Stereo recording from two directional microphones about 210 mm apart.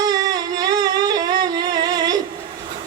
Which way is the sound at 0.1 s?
20° right (ahead or behind).